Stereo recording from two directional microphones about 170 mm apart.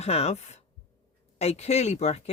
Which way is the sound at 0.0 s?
40° left (ahead or behind).